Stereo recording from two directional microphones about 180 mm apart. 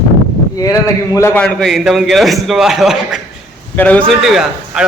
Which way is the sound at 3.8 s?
10° left (ahead or behind).